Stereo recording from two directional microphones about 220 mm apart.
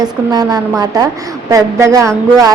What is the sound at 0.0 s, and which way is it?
A woman's voice, 15° right (ahead or behind).